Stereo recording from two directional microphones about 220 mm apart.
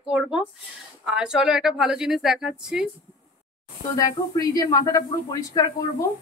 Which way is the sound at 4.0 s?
15° left (ahead or behind).